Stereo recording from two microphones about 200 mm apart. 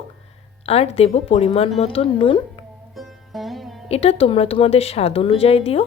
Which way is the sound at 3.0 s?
Centre (ahead or behind).